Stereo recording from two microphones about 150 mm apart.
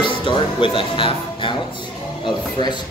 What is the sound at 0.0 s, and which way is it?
Speech, 35° left (ahead or behind).